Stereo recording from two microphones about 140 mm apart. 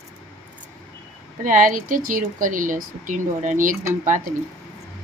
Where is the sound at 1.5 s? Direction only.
70° right (ahead or behind).